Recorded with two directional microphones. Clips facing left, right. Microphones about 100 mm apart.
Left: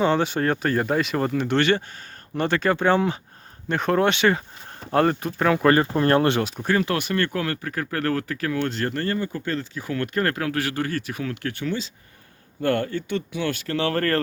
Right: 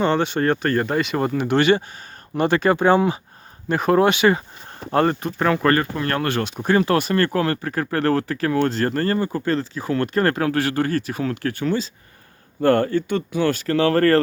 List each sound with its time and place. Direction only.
0.0 s speech: 5° left (ahead or behind)
5.8 s speech: 30° left (ahead or behind)
6.7 s speech: 35° right (ahead or behind)